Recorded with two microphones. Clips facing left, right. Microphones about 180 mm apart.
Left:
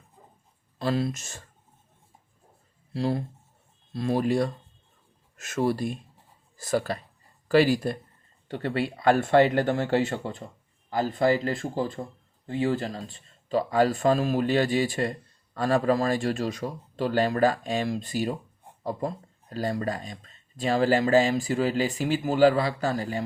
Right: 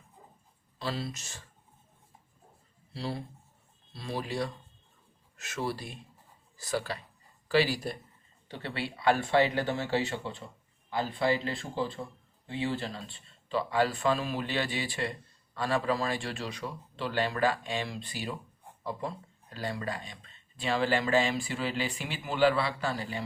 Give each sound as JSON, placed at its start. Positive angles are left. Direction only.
{"t": 0.8, "sound": "speech", "side_deg": 50}
{"t": 2.9, "sound": "speech", "side_deg": 45}